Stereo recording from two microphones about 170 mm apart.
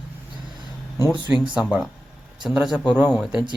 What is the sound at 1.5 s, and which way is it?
Speech, 5° right (ahead or behind).